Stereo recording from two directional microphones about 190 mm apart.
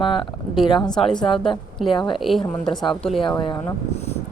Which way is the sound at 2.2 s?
Centre (ahead or behind).